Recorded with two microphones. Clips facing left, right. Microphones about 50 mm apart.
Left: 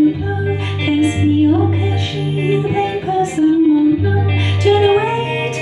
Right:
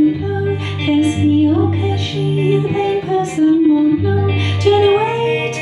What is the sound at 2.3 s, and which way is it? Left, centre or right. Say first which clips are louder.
Music: even; centre.